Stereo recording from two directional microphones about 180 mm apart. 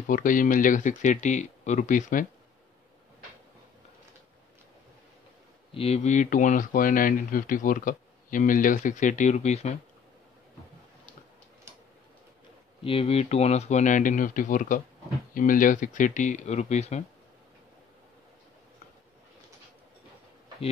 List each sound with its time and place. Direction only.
0.1 s speech: 45° left (ahead or behind)
5.7 s speech: 35° left (ahead or behind)
12.8 s speech: 35° left (ahead or behind)